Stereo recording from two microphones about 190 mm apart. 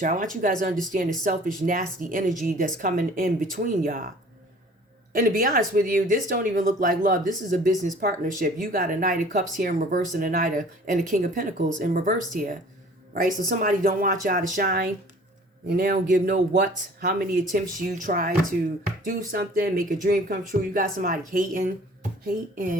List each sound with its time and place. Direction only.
0.0 s speech: 45° right (ahead or behind)
5.1 s speech: 45° right (ahead or behind)